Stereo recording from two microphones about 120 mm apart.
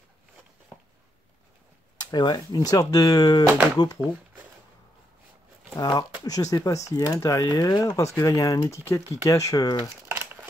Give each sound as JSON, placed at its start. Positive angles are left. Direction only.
{"t": 2.0, "sound": "speech", "side_deg": 35}
{"t": 5.8, "sound": "speech", "side_deg": 30}
{"t": 10.0, "sound": "a sound", "side_deg": -20}